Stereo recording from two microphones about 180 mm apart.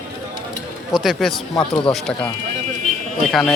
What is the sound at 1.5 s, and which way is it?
Speech, 25° left (ahead or behind).